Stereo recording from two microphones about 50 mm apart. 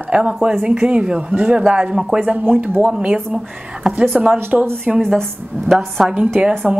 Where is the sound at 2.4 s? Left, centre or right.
Right.